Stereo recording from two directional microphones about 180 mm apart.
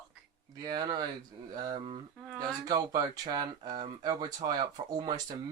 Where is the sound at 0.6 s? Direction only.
25° right (ahead or behind).